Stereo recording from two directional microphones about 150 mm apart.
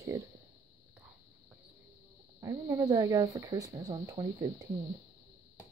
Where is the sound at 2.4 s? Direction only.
20° right (ahead or behind).